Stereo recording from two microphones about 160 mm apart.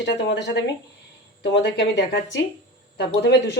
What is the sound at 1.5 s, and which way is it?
Speech, 90° left.